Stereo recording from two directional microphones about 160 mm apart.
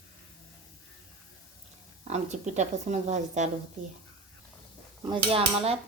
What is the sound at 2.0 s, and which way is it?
A woman's voice, 45° right (ahead or behind).